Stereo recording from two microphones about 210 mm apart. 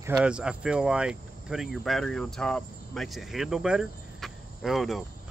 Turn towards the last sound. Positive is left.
turn(degrees=0)  # may be behind; listen again after turning